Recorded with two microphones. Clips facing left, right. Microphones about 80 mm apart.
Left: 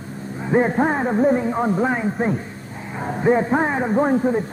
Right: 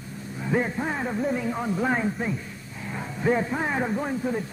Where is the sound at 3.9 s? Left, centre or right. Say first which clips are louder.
Left 10 dB; left.